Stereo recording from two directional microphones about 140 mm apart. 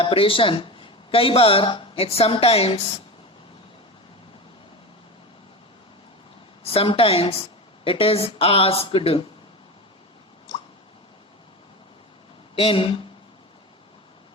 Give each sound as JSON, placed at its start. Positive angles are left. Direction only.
{"t": 0.0, "sound": "speech", "side_deg": 40}
{"t": 6.6, "sound": "a woman's voice", "side_deg": 45}
{"t": 12.5, "sound": "speech", "side_deg": 40}